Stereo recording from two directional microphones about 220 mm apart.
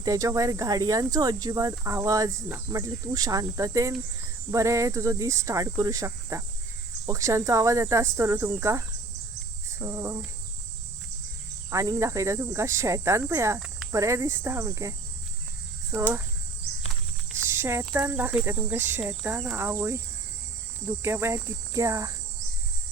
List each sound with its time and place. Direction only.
0.0 s speech: 15° right (ahead or behind)
9.6 s cricket: 15° right (ahead or behind)
11.7 s speech: 15° right (ahead or behind)
17.3 s speech: 10° right (ahead or behind)
21.0 s speech: 10° right (ahead or behind)